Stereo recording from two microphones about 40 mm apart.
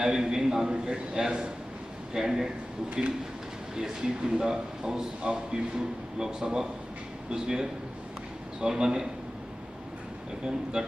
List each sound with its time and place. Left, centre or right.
0.0 s speech: centre
3.8 s speech: centre
10.4 s speech: right